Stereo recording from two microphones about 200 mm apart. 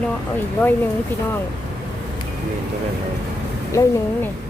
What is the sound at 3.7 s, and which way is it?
Speech, 15° left (ahead or behind).